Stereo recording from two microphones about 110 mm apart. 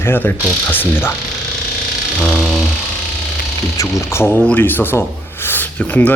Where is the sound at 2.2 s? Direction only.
5° right (ahead or behind).